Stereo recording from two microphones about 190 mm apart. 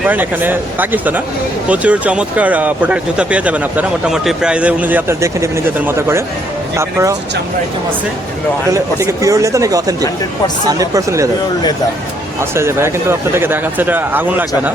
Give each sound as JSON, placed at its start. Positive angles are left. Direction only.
{"t": 0.0, "sound": "speech", "side_deg": -10}
{"t": 8.7, "sound": "speech", "side_deg": -15}
{"t": 12.4, "sound": "speech", "side_deg": -15}